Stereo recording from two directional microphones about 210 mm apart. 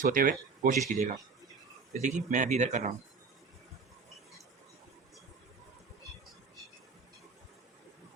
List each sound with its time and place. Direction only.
0.0 s speech: 40° right (ahead or behind)